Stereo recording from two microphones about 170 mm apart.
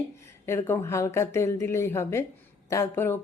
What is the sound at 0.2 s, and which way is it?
Speech, 15° left (ahead or behind).